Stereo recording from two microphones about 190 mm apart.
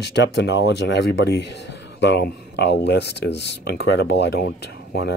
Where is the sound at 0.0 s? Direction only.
65° left (ahead or behind).